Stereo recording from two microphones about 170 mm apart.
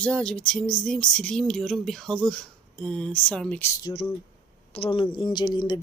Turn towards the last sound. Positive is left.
turn(degrees=25)  # may be behind; listen again after turning